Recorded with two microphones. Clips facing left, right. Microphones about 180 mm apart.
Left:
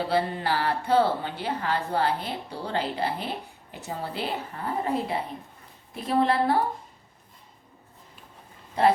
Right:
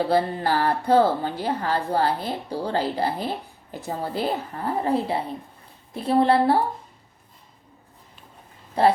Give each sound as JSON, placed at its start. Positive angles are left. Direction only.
{"t": 0.1, "sound": "a woman's voice", "side_deg": -45}